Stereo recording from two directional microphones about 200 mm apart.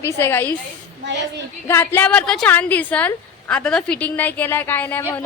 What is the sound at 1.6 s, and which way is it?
Speech, 10° left (ahead or behind).